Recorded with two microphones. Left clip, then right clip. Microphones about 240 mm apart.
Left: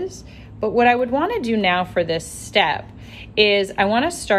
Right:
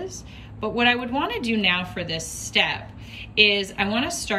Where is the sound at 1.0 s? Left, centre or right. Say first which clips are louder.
Left 6 dB; centre.